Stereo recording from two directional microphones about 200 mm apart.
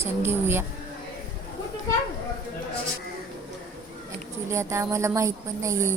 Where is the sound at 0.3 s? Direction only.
10° right (ahead or behind).